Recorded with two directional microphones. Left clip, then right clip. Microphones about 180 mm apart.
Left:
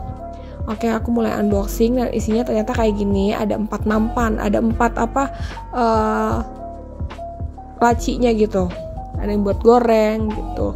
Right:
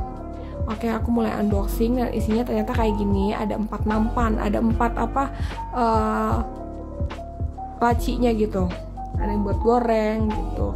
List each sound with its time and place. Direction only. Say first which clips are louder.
0.7 s a woman's voice: left 5 dB; 30° left (ahead or behind)
7.8 s a woman's voice: left 5 dB; 30° left (ahead or behind)
9.2 s speech: left 7 dB; 40° left (ahead or behind)